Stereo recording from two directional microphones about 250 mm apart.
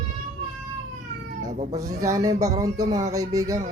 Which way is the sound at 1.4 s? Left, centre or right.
Right.